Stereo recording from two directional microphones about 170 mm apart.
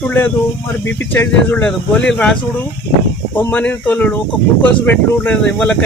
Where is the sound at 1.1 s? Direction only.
10° left (ahead or behind).